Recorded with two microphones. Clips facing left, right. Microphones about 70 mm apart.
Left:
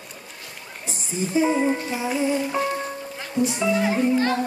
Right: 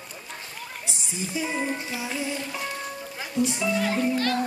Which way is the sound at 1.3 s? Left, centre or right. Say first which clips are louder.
Left 9 dB; left.